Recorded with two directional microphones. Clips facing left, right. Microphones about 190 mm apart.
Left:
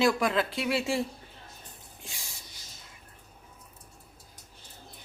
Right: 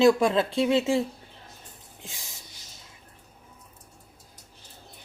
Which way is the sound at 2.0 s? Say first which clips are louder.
Right 2 dB; 20° right (ahead or behind).